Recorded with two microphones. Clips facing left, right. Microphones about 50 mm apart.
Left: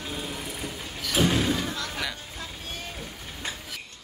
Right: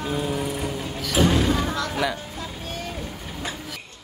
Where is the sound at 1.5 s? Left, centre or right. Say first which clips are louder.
Right 5 dB; centre.